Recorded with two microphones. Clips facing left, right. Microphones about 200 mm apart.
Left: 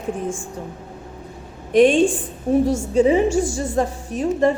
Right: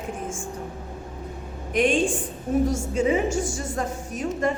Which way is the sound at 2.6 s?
35° left (ahead or behind).